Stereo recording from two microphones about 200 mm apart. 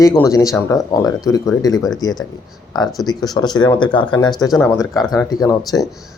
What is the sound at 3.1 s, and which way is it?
Speech, 20° left (ahead or behind).